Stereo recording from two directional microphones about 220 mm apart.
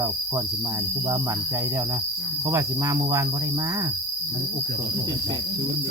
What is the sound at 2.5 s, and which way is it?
Cricket, 15° right (ahead or behind).